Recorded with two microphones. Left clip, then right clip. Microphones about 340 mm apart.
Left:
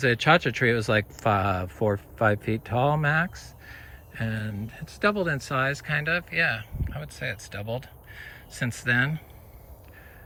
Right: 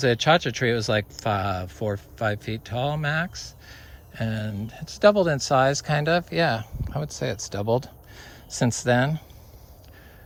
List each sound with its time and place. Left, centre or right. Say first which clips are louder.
0.0 s speech: right 1 dB; centre